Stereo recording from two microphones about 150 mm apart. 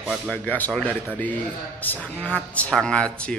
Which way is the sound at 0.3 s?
10° left (ahead or behind).